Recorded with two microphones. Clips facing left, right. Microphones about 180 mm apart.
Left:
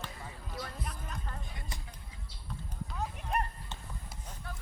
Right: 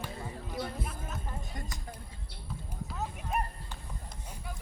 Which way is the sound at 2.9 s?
Centre (ahead or behind).